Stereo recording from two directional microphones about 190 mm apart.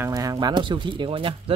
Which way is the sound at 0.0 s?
20° right (ahead or behind).